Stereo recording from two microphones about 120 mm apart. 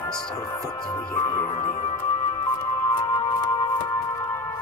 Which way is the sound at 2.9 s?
35° left (ahead or behind).